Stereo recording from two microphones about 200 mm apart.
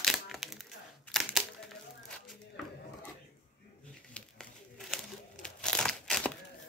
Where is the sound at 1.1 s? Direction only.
Centre (ahead or behind).